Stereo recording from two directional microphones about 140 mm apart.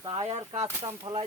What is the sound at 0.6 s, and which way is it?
Speech, 40° right (ahead or behind).